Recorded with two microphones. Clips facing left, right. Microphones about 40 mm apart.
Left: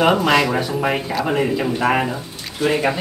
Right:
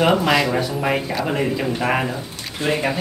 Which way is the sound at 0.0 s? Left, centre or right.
Centre.